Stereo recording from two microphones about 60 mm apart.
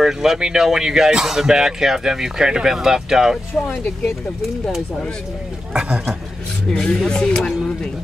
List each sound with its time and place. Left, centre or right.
0.0 s speech: centre
3.6 s speech: centre
5.7 s speech: centre
6.7 s speech: centre